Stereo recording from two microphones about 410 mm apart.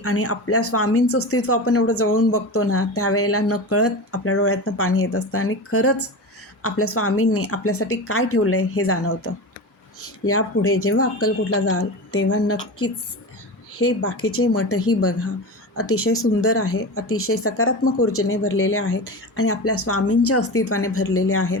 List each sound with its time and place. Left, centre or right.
0.0 s speech: left
13.7 s speech: left